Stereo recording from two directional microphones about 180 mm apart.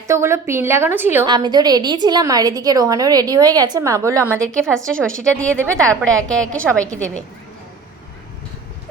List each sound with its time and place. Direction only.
0.1 s a woman's voice: 15° right (ahead or behind)
1.3 s a woman's voice: 25° right (ahead or behind)
4.4 s a woman's voice: 5° left (ahead or behind)
6.5 s a woman's voice: 15° right (ahead or behind)